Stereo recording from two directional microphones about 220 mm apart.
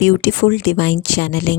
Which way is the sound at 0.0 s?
55° left (ahead or behind).